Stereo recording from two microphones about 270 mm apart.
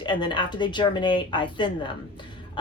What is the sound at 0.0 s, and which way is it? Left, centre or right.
A woman's voice, centre.